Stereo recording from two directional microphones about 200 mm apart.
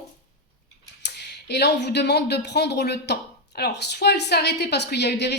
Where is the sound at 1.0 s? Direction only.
55° left (ahead or behind).